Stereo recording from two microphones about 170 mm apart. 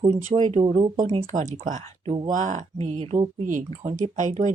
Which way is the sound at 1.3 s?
45° right (ahead or behind).